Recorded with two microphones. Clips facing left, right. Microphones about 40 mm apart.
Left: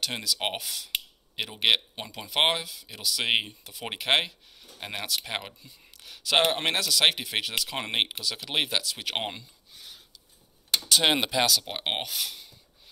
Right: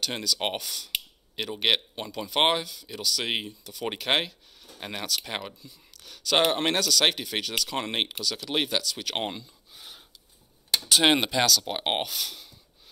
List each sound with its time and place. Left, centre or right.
0.0 s speech: centre
3.2 s speech: left
3.7 s speech: centre
9.8 s a sound: centre
10.9 s speech: centre